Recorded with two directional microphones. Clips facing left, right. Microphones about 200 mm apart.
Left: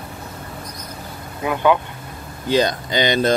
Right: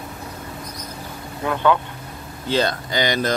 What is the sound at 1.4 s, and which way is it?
Speech, 15° left (ahead or behind).